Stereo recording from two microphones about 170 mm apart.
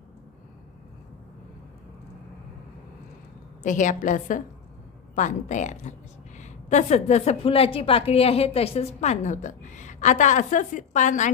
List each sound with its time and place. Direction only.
3.6 s a woman's voice: 50° left (ahead or behind)